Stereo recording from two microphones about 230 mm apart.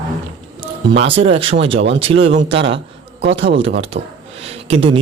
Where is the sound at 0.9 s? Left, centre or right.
Right.